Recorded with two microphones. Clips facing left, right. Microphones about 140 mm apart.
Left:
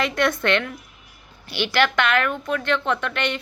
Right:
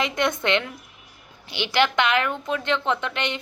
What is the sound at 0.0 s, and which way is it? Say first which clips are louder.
A woman's voice: left 2 dB; 20° right (ahead or behind).